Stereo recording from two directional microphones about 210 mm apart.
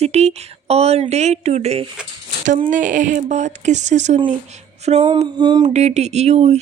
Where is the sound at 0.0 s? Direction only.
30° right (ahead or behind).